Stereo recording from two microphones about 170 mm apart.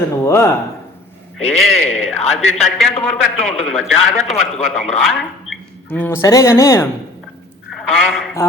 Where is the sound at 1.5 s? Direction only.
Centre (ahead or behind).